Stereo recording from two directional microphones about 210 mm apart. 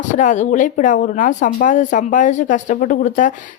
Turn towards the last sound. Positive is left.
turn(degrees=40)  # may be behind; listen again after turning